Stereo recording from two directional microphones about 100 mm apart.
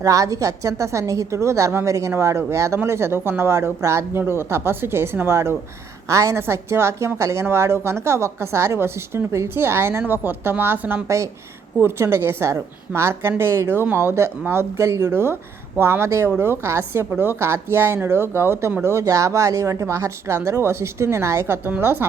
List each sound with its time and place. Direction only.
0.0 s a woman's voice: 35° right (ahead or behind)